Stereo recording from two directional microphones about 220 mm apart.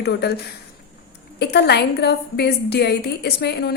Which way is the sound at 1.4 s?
50° left (ahead or behind).